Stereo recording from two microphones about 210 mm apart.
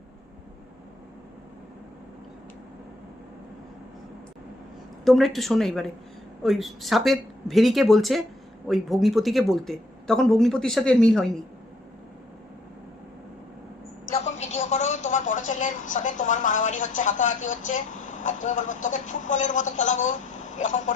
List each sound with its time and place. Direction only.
5.0 s speech: centre (ahead or behind)
14.3 s a woman's voice: 35° left (ahead or behind)